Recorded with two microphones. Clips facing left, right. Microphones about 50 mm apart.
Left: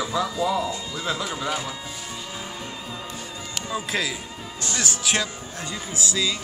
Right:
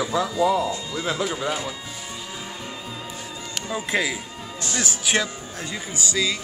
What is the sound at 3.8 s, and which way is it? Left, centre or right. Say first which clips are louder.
Speech: right 4 dB; right.